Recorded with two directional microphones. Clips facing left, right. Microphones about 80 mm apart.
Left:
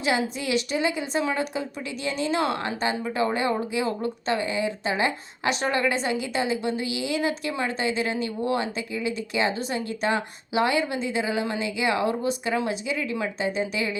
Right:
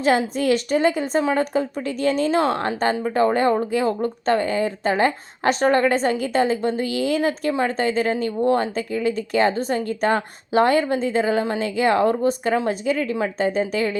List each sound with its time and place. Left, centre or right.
0.0 s a woman's voice: right